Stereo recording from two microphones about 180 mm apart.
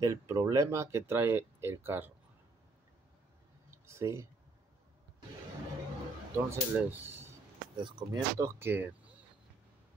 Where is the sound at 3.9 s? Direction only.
15° right (ahead or behind).